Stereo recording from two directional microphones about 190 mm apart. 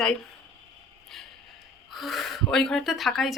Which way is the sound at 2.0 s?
Centre (ahead or behind).